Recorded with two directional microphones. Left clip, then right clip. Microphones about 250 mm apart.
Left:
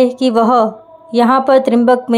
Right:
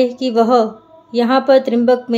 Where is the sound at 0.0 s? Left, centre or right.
Centre.